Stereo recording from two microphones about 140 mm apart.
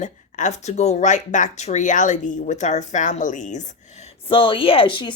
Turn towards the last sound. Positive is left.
turn(degrees=35)  # may be behind; listen again after turning